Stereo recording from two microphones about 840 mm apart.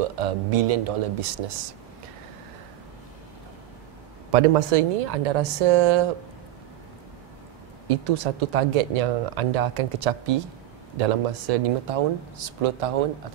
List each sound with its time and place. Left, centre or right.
0.1 s speech: right
4.3 s speech: right
7.9 s speech: right